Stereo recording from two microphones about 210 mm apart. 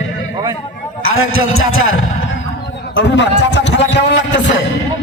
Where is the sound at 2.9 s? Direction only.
60° left (ahead or behind).